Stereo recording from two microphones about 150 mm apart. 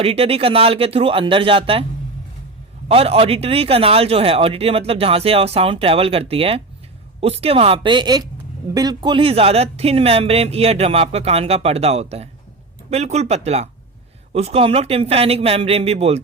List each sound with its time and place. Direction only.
0.0 s speech: 40° right (ahead or behind)
2.9 s speech: 40° right (ahead or behind)